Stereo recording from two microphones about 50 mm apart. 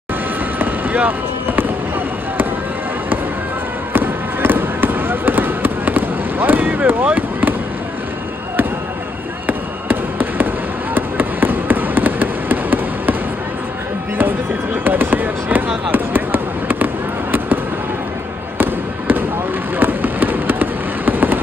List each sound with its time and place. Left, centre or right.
0.6 s vehicle: right
3.9 s fireworks: right
9.5 s a sound: right
14.1 s fireworks: right
18.6 s fireworks: right